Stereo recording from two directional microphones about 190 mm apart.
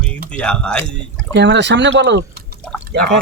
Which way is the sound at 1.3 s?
65° right (ahead or behind).